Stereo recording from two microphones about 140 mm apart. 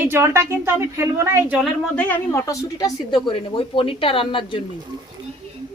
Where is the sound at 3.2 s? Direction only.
40° left (ahead or behind).